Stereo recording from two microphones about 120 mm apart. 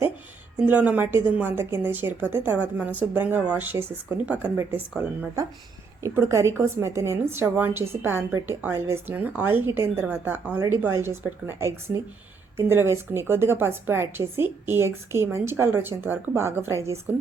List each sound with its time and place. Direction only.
0.6 s a woman's voice: 10° right (ahead or behind)
6.0 s a woman's voice: 25° right (ahead or behind)